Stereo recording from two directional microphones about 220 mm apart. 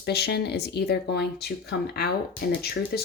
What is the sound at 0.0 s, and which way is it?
Speech, 45° left (ahead or behind).